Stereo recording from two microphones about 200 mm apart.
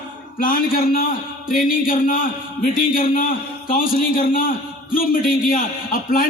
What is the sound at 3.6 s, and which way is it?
A man's voice, 45° left (ahead or behind).